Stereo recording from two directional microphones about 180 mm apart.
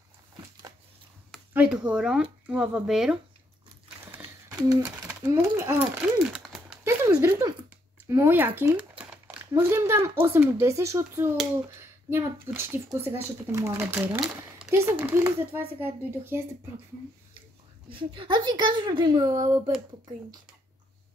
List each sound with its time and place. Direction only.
1.5 s speech: 5° right (ahead or behind)
4.0 s a sound: 10° right (ahead or behind)
4.6 s speech: 15° right (ahead or behind)
6.8 s a sound: 15° right (ahead or behind)
8.1 s speech: 15° right (ahead or behind)
12.5 s speech: 15° right (ahead or behind)
17.8 s a woman's voice: 30° right (ahead or behind)